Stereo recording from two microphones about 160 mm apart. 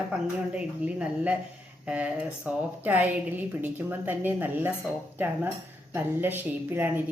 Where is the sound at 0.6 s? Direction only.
10° right (ahead or behind).